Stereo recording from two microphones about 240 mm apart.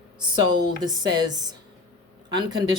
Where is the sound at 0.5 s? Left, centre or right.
Centre.